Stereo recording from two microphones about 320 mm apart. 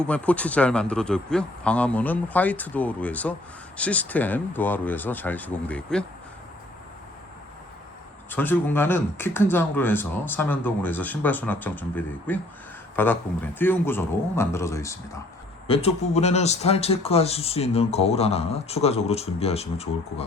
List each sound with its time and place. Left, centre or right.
0.0 s speech: centre
8.3 s speech: centre